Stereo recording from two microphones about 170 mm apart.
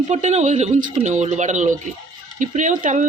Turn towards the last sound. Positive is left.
turn(degrees=-45)  # may be behind; listen again after turning